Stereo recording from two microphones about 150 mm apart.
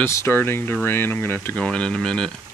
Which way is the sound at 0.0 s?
15° left (ahead or behind).